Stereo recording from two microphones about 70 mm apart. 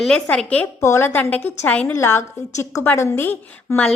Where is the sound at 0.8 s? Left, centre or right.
Left.